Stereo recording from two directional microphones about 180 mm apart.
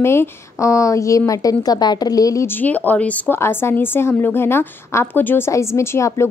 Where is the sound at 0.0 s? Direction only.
15° left (ahead or behind).